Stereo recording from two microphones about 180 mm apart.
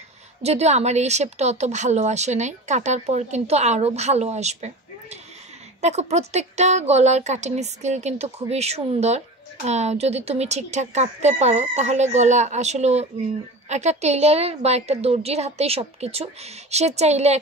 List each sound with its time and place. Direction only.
0.4 s speech: 35° right (ahead or behind)